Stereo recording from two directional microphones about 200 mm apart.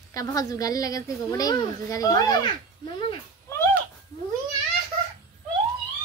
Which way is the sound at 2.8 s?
20° left (ahead or behind).